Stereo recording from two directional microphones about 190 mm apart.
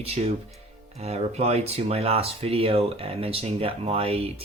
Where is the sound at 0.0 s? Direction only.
35° right (ahead or behind).